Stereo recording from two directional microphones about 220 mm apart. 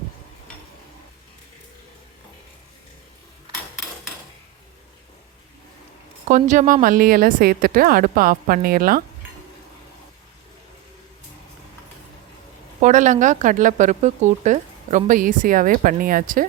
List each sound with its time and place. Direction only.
6.2 s speech: 35° right (ahead or behind)
12.8 s speech: 35° right (ahead or behind)